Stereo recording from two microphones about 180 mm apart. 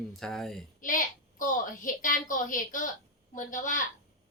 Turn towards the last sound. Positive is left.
turn(degrees=45)  # may be behind; listen again after turning